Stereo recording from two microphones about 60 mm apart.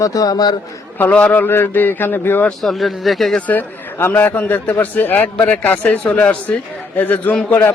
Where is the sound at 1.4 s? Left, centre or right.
Left.